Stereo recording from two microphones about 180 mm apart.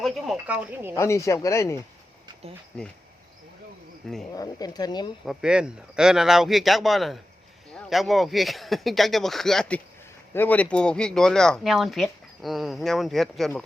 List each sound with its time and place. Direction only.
0.0 s speech: 5° right (ahead or behind)
0.9 s speech: 15° left (ahead or behind)
4.0 s speech: centre (ahead or behind)
4.4 s a woman's voice: 20° left (ahead or behind)
5.2 s speech: 5° right (ahead or behind)